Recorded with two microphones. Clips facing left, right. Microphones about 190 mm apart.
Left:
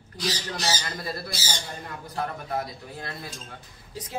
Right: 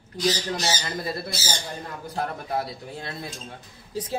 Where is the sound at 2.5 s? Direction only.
25° right (ahead or behind).